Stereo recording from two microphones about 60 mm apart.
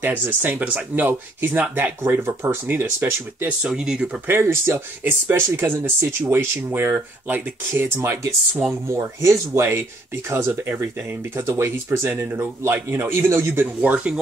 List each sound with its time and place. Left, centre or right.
0.0 s speech: right
3.0 s speech: right
4.3 s speech: right
8.8 s speech: right
10.3 s speech: right
11.4 s speech: right
13.7 s speech: right